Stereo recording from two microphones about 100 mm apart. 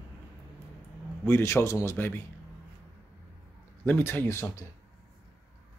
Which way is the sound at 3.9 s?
20° left (ahead or behind).